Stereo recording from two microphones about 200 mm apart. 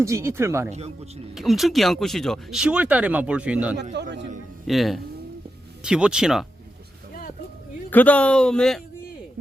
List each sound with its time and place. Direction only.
0.0 s speech: 15° right (ahead or behind)
1.4 s speech: centre (ahead or behind)
3.9 s a man's voice: 60° right (ahead or behind)
4.6 s speech: centre (ahead or behind)
7.9 s speech: 10° left (ahead or behind)